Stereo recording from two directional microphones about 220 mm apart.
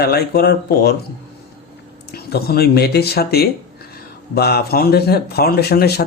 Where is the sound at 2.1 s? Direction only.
45° left (ahead or behind).